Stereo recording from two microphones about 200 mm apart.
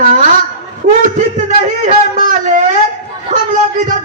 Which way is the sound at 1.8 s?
40° right (ahead or behind).